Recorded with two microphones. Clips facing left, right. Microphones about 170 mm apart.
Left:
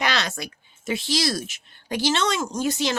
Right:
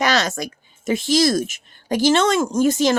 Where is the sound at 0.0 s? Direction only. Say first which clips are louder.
Right 6 dB; 45° right (ahead or behind).